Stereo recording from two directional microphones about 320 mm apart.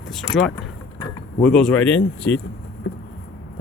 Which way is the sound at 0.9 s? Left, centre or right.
Centre.